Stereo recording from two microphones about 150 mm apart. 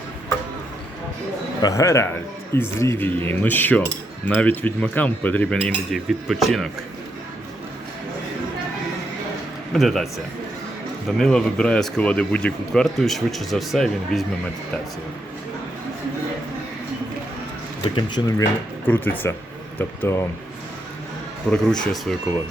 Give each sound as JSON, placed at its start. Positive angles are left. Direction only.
{"t": 1.6, "sound": "speech", "side_deg": 20}
{"t": 5.5, "sound": "speech", "side_deg": 0}
{"t": 9.7, "sound": "speech", "side_deg": 0}
{"t": 11.2, "sound": "speech", "side_deg": 5}
{"t": 17.9, "sound": "speech", "side_deg": 30}
{"t": 18.9, "sound": "speech", "side_deg": 10}
{"t": 21.5, "sound": "speech", "side_deg": 5}